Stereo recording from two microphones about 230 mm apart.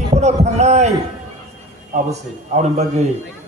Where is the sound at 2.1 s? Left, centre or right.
Right.